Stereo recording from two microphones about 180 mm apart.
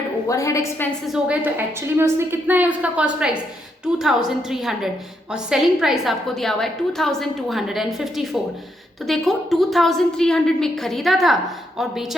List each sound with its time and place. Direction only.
0.3 s a woman's voice: 15° left (ahead or behind)
1.0 s a woman's voice: 5° right (ahead or behind)